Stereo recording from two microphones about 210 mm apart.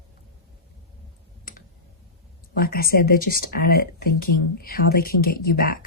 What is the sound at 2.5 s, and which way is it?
Speech, 45° left (ahead or behind).